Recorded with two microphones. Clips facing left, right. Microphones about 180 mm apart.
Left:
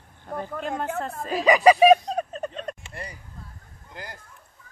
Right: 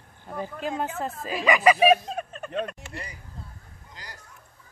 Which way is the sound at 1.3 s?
35° left (ahead or behind).